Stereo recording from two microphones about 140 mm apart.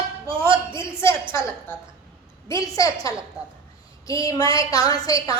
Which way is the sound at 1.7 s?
15° left (ahead or behind).